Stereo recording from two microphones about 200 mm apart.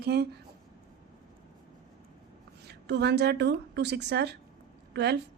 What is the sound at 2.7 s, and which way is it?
A woman's voice, 55° right (ahead or behind).